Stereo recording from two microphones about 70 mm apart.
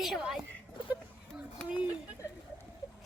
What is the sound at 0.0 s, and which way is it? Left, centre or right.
Speech, centre.